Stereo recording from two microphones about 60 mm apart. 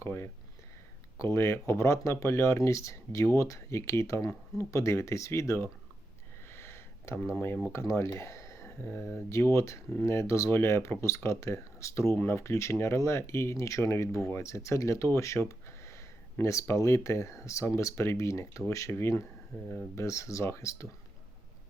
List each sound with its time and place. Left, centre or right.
0.0 s speech: left
6.5 s a sound: left
7.4 s speech: left
7.7 s speech: left
12.1 s speech: left
12.4 s speech: left
19.5 s speech: left
20.0 s speech: left